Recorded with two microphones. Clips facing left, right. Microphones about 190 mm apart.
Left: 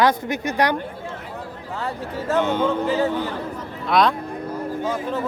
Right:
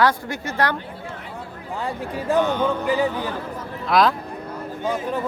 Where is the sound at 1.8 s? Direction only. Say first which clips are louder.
Right 1 dB; 15° right (ahead or behind).